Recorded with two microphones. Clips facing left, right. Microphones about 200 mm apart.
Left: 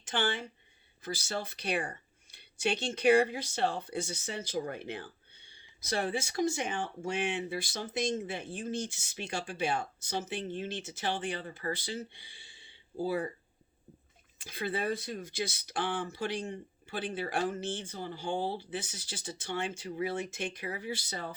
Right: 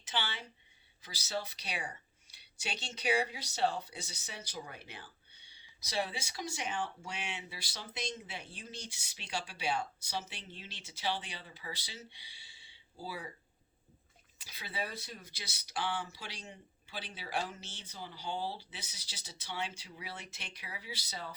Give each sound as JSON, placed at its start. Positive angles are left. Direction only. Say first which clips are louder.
{"t": 0.0, "sound": "speech", "louder": "left 7 dB", "side_deg": 50}
{"t": 14.3, "sound": "speech", "louder": "left 8 dB", "side_deg": 50}